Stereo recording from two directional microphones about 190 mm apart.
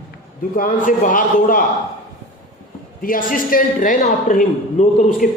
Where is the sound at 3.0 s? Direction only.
45° left (ahead or behind).